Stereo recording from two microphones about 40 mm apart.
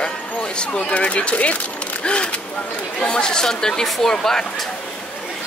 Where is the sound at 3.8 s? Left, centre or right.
Centre.